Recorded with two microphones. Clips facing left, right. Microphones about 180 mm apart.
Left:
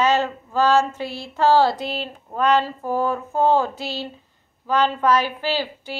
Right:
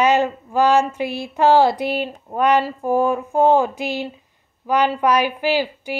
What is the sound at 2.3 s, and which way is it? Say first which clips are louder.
A woman's voice: right 2 dB; 15° right (ahead or behind).